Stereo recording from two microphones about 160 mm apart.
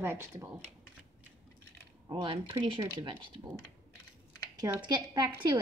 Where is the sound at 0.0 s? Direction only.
15° right (ahead or behind).